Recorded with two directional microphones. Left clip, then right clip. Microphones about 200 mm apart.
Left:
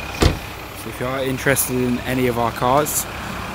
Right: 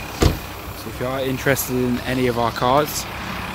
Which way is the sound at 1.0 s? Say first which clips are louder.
Left 1 dB; centre (ahead or behind).